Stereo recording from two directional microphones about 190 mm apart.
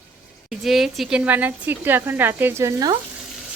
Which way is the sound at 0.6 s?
Centre (ahead or behind).